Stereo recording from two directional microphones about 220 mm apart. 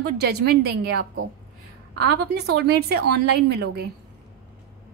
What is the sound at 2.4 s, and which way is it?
A woman's voice, 50° right (ahead or behind).